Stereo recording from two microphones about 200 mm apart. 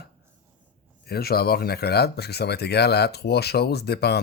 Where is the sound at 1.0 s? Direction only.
50° left (ahead or behind).